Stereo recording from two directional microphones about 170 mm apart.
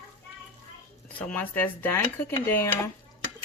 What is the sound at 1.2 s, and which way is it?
Speech, 10° left (ahead or behind).